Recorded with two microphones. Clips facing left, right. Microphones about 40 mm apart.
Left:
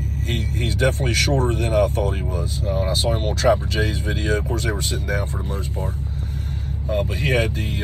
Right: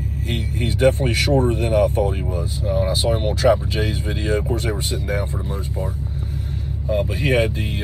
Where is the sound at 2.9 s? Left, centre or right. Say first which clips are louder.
Right 2 dB; right.